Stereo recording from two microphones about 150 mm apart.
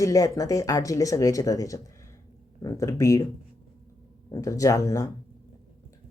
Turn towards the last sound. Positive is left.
turn(degrees=20)  # may be behind; listen again after turning